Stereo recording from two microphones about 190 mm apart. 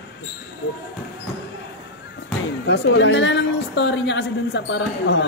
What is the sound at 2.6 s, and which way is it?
Speech, 70° left (ahead or behind).